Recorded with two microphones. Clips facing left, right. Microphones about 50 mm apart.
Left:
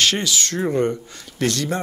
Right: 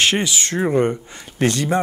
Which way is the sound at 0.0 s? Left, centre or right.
Right.